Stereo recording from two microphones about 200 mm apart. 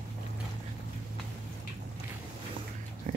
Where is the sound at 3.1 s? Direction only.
40° right (ahead or behind).